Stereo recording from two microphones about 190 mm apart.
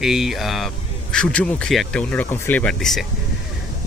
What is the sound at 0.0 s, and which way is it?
Speech, centre (ahead or behind).